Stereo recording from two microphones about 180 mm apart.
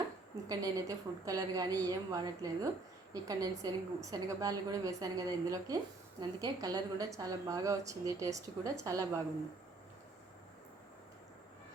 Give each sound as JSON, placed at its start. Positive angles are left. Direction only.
{"t": 0.4, "sound": "a woman's voice", "side_deg": -20}